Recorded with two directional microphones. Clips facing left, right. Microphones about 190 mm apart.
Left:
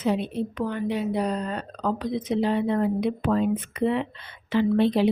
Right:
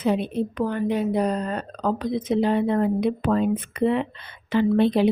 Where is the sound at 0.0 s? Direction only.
50° right (ahead or behind).